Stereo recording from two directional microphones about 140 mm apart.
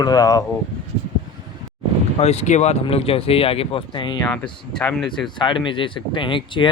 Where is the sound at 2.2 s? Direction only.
50° left (ahead or behind); by 4.3 s 35° left (ahead or behind).